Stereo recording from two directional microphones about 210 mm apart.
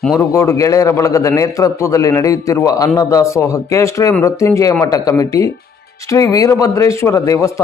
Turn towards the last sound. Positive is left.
turn(degrees=15)  # may be behind; listen again after turning